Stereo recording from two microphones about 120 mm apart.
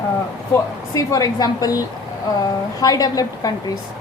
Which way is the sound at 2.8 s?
30° left (ahead or behind).